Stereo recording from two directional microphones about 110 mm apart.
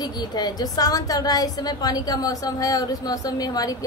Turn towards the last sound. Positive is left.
turn(degrees=35)  # may be behind; listen again after turning